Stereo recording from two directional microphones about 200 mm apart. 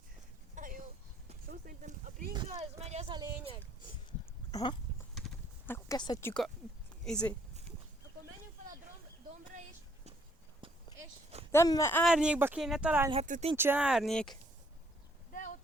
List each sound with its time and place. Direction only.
0.5 s a sound: 40° right (ahead or behind)
2.3 s a sound: 25° right (ahead or behind)
4.5 s speech: 25° left (ahead or behind)
5.6 s a sound: 15° left (ahead or behind)
7.0 s speech: 5° left (ahead or behind)
10.6 s clip-clop: 25° right (ahead or behind)
11.5 s speech: 15° left (ahead or behind)
12.0 s speech: 5° right (ahead or behind)
13.2 s speech: 40° right (ahead or behind)
13.6 s speech: 10° right (ahead or behind)
15.3 s clip-clop: 40° left (ahead or behind)